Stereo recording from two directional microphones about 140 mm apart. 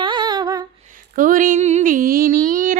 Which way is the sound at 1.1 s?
70° right (ahead or behind).